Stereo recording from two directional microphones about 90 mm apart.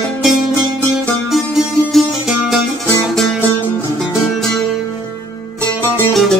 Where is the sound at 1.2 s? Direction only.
Centre (ahead or behind).